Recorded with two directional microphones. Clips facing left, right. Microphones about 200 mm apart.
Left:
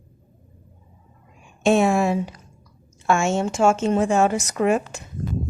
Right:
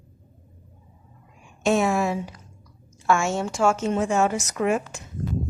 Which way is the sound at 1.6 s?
30° left (ahead or behind).